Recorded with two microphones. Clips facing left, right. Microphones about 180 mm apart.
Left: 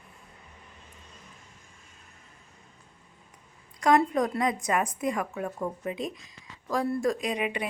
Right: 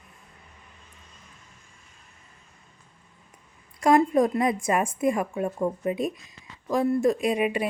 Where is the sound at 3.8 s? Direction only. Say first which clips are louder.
Right 4 dB; 25° right (ahead or behind).